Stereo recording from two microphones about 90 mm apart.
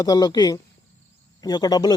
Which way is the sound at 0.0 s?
45° left (ahead or behind).